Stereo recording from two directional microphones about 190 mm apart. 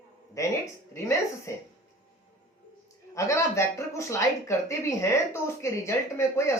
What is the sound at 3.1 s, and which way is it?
Speech, 15° left (ahead or behind).